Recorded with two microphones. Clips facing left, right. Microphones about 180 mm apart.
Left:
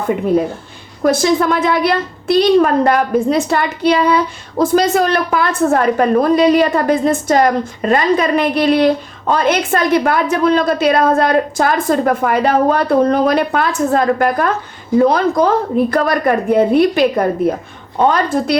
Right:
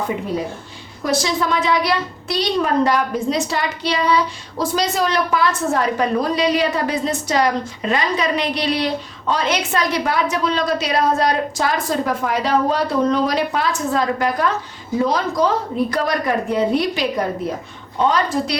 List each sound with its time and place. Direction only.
1.0 s a woman's voice: 55° left (ahead or behind)